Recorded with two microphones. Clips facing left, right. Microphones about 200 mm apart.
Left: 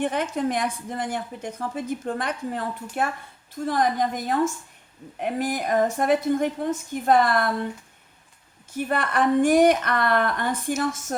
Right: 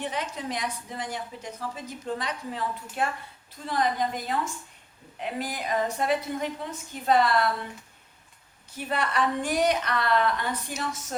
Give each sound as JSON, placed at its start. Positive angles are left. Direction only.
{"t": 0.0, "sound": "a woman's voice", "side_deg": 55}
{"t": 8.9, "sound": "a woman's voice", "side_deg": 50}